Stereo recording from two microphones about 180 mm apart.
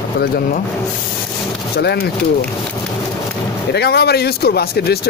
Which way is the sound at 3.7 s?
65° left (ahead or behind).